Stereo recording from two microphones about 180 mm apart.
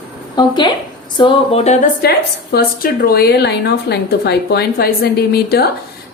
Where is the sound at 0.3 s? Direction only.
25° left (ahead or behind).